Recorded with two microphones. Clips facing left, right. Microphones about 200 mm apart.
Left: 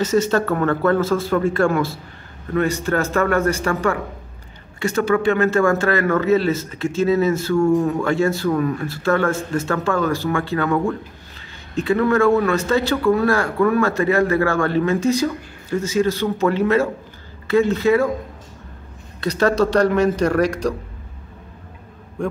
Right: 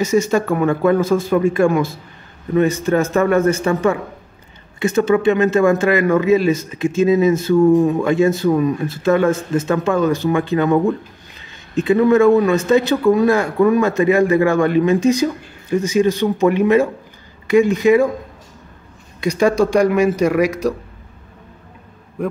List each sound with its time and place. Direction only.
0.0 s a man's voice: 10° right (ahead or behind)
19.2 s a man's voice: 10° right (ahead or behind)